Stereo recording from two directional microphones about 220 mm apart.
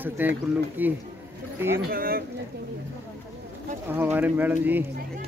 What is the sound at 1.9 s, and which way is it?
Speech, 45° right (ahead or behind).